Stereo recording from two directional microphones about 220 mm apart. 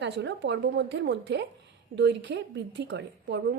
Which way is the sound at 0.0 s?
55° right (ahead or behind).